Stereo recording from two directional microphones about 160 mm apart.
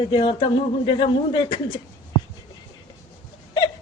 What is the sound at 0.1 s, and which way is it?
A man's voice, 30° left (ahead or behind).